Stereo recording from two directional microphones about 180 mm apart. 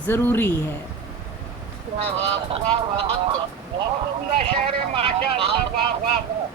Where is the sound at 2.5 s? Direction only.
30° right (ahead or behind).